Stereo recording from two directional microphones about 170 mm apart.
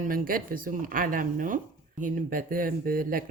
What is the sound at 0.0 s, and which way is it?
Speech, 55° right (ahead or behind).